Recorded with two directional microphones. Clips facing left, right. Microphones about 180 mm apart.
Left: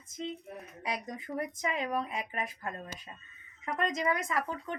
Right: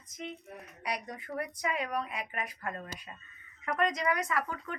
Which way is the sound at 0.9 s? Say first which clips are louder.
Left 1 dB; 25° left (ahead or behind).